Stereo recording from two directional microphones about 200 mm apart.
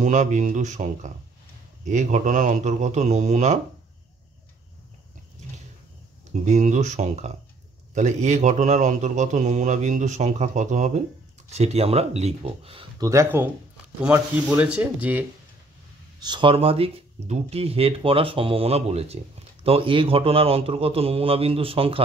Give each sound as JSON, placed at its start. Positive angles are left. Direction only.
{"t": 0.0, "sound": "speech", "side_deg": -40}
{"t": 6.4, "sound": "speech", "side_deg": -35}
{"t": 13.0, "sound": "speech", "side_deg": -15}
{"t": 16.2, "sound": "speech", "side_deg": -20}